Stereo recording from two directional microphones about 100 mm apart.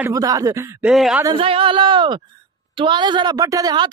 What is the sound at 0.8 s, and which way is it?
Speech, 5° right (ahead or behind).